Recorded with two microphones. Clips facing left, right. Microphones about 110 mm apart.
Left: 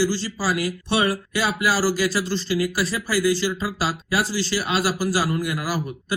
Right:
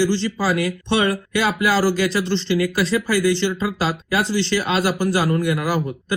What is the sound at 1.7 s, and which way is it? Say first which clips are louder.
Speech: right 3 dB; 25° right (ahead or behind).